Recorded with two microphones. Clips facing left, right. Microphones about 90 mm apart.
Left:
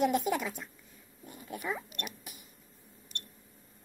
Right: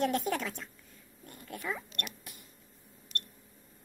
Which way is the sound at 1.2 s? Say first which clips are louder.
Left 1 dB; 10° left (ahead or behind).